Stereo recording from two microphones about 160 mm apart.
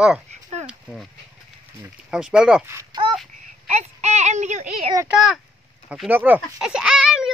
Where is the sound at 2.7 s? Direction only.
25° right (ahead or behind).